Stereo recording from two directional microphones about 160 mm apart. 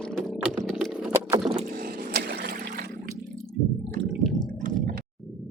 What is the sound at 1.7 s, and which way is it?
Water, 70° right (ahead or behind).